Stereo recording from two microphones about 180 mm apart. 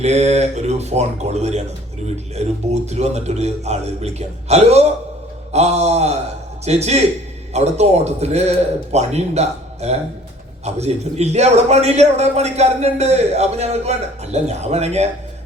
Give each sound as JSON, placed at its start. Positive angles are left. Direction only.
{"t": 0.0, "sound": "a man's voice", "side_deg": -40}